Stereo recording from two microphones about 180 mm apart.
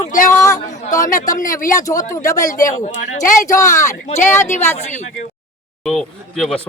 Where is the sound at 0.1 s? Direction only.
45° left (ahead or behind).